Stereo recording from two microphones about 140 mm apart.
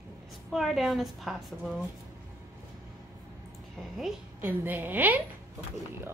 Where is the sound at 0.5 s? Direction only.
Centre (ahead or behind).